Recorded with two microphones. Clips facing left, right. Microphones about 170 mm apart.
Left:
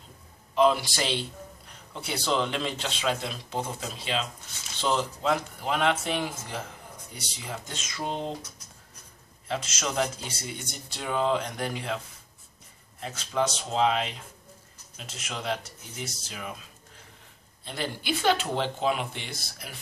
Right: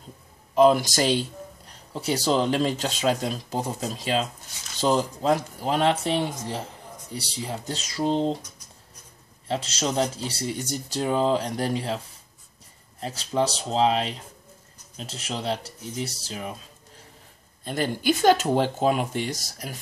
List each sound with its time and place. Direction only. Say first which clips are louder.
0.6 s a man's voice: right 5 dB; 45° right (ahead or behind)
9.5 s speech: right 5 dB; 30° right (ahead or behind)
13.0 s speech: right 3 dB; 35° right (ahead or behind)
17.6 s speech: right 7 dB; 45° right (ahead or behind)